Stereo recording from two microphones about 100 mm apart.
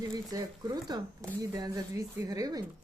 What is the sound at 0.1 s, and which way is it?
Speech, 35° right (ahead or behind).